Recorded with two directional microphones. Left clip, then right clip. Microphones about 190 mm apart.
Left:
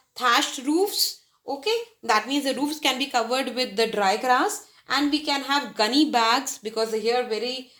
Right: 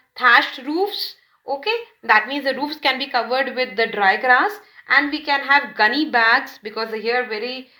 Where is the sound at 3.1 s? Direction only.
35° left (ahead or behind).